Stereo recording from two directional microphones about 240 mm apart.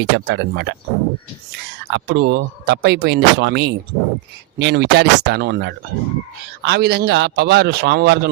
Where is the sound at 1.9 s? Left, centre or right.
Right.